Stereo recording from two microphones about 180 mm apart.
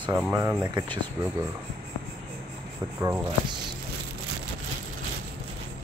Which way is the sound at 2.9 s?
15° right (ahead or behind).